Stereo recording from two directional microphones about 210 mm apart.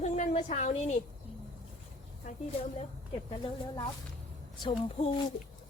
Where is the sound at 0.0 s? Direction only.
35° left (ahead or behind).